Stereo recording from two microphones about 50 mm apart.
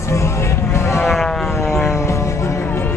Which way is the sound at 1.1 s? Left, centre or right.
Centre.